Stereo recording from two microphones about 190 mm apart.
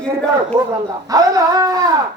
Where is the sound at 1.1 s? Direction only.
20° right (ahead or behind).